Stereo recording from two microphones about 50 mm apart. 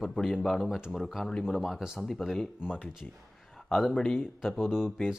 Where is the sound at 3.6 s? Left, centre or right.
Centre.